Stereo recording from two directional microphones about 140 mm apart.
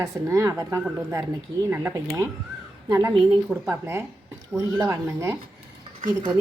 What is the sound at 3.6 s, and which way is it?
A woman's voice, 15° right (ahead or behind).